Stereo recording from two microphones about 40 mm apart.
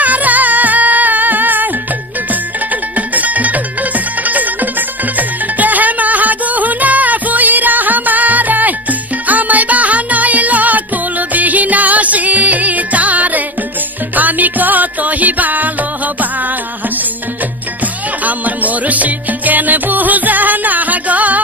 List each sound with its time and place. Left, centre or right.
0.0 s music: right
2.7 s music: right
18.2 s music: right